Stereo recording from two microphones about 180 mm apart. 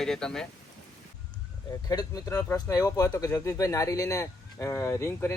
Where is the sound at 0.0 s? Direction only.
5° left (ahead or behind).